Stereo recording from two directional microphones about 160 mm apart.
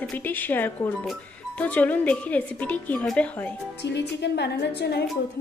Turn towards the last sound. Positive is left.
turn(degrees=90)